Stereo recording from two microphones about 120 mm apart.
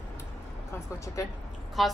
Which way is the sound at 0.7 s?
25° left (ahead or behind).